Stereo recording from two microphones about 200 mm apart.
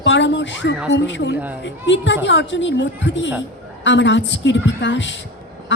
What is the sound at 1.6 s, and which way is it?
A woman's voice, 65° left (ahead or behind).